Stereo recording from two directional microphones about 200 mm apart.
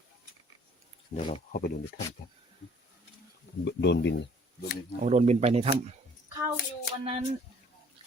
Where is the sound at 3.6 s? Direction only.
60° left (ahead or behind).